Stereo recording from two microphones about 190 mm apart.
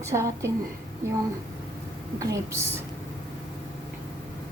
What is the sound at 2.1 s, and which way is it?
Speech, 15° right (ahead or behind).